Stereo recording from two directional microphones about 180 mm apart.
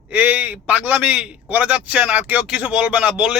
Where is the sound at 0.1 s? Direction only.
5° right (ahead or behind).